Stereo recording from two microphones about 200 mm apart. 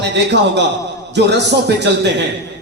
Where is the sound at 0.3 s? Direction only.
60° right (ahead or behind).